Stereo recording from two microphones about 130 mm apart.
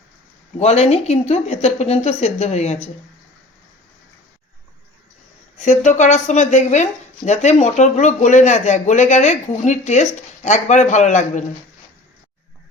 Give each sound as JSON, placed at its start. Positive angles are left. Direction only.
{"t": 0.6, "sound": "speech", "side_deg": 55}
{"t": 5.5, "sound": "speech", "side_deg": 65}